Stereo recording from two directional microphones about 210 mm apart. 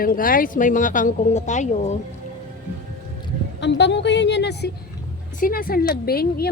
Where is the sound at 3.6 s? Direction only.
55° left (ahead or behind).